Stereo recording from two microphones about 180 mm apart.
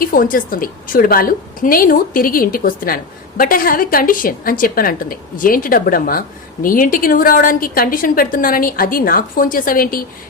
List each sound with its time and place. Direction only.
0.0 s a woman's voice: 50° left (ahead or behind)